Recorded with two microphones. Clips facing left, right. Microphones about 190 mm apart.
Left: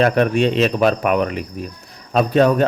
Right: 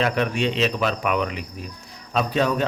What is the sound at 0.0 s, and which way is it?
A man's voice, 50° left (ahead or behind).